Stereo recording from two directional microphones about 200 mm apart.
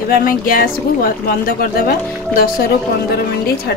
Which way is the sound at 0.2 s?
45° left (ahead or behind).